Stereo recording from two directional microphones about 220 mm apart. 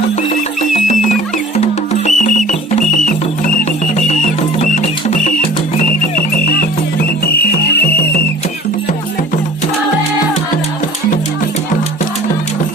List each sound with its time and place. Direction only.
0.7 s music: 30° left (ahead or behind)
4.6 s music: 30° left (ahead or behind)